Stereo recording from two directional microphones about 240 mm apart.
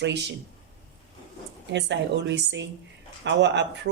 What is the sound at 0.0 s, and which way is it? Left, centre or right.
Speech, right.